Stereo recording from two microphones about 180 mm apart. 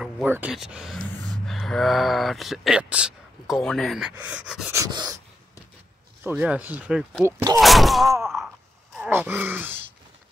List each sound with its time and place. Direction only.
0.0 s speech: 5° right (ahead or behind)
4.7 s dog: 20° right (ahead or behind)
6.2 s speech: 10° right (ahead or behind)
7.2 s speech: 15° right (ahead or behind)
7.6 s speech: centre (ahead or behind)
8.9 s groan: 10° right (ahead or behind)